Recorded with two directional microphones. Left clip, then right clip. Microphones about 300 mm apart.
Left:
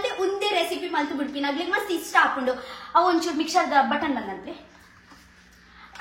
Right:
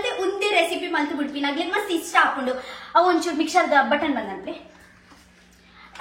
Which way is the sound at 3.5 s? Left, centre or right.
Centre.